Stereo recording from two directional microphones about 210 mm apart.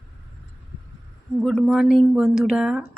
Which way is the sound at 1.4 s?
Centre (ahead or behind).